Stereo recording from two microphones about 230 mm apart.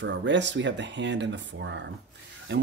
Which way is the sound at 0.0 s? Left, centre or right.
Right.